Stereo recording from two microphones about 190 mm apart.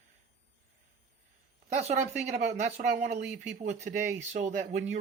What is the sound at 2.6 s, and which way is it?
Speech, 40° right (ahead or behind).